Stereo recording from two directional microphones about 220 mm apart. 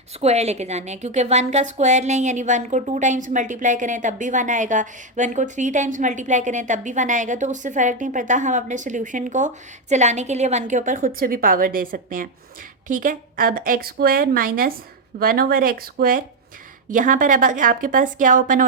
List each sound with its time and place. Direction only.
0.2 s a woman's voice: 30° right (ahead or behind)